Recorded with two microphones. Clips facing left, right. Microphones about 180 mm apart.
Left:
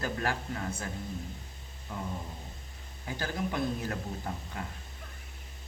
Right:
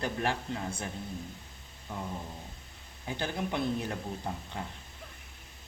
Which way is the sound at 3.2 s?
20° right (ahead or behind).